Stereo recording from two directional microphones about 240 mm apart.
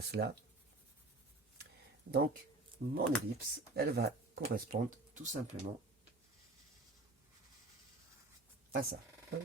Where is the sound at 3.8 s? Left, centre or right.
Right.